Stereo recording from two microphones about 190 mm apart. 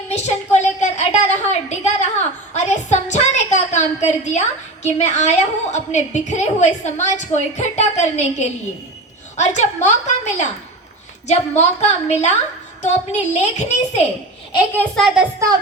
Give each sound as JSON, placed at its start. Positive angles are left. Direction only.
{"t": 0.1, "sound": "a woman's voice", "side_deg": 35}
{"t": 2.5, "sound": "a sound", "side_deg": 35}
{"t": 4.9, "sound": "a woman's voice", "side_deg": 35}
{"t": 14.8, "sound": "a child's voice", "side_deg": 0}